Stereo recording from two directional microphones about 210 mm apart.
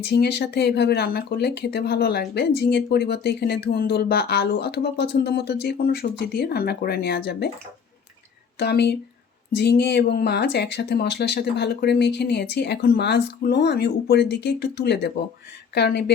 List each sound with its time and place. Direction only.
0.0 s speech: 50° left (ahead or behind)
8.5 s speech: 50° left (ahead or behind)